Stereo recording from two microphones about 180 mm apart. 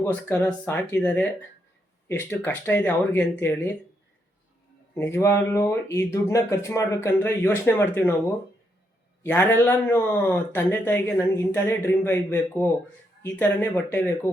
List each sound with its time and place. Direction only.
0.0 s speech: 10° left (ahead or behind)
4.9 s speech: 15° left (ahead or behind)
9.2 s speech: 10° left (ahead or behind)